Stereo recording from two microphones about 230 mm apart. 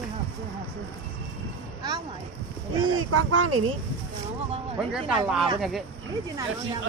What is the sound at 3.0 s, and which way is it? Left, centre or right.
Speech, right.